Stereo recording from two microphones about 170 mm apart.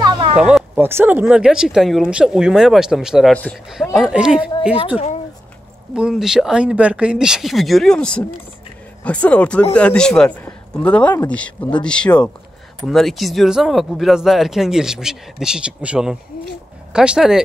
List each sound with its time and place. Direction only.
0.0 s a sound: 25° right (ahead or behind)
0.4 s speech: 5° right (ahead or behind)
4.9 s speech: 40° left (ahead or behind)
5.9 s a man's voice: 5° right (ahead or behind)